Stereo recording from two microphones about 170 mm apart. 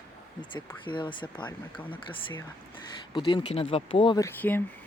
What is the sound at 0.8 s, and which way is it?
Speech, 30° left (ahead or behind).